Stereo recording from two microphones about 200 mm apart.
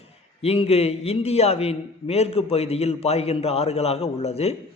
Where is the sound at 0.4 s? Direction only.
30° left (ahead or behind).